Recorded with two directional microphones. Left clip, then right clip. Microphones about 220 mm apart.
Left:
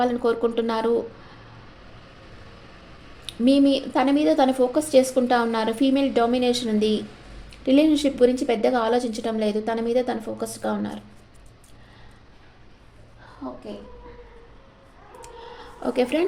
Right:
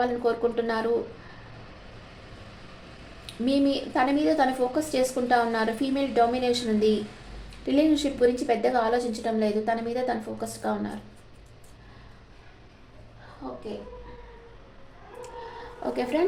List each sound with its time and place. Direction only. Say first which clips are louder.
0.0 s a woman's voice: left 3 dB; 40° left (ahead or behind)
3.2 s a woman's voice: left 6 dB; 40° left (ahead or behind)
15.8 s a woman's voice: left 5 dB; 45° left (ahead or behind)